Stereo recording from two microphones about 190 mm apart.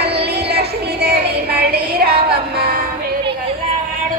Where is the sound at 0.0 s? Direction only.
60° right (ahead or behind).